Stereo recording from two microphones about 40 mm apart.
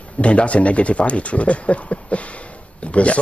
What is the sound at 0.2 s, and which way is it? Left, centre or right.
Speech, left.